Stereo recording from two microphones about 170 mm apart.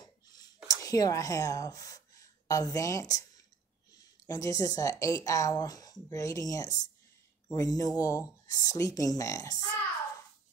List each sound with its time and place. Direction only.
0.8 s a woman's voice: 20° left (ahead or behind)